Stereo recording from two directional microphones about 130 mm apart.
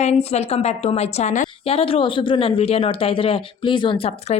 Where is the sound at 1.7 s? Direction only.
45° left (ahead or behind).